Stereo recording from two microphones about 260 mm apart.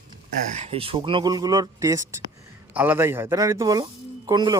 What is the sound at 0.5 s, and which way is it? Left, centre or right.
Speech, right.